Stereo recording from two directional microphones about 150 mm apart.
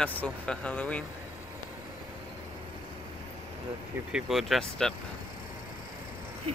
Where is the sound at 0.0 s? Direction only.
10° left (ahead or behind).